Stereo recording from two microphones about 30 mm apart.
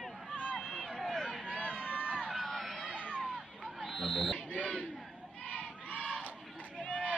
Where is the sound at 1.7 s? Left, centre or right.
Left.